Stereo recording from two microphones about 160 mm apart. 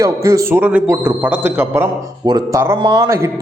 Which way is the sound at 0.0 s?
20° right (ahead or behind).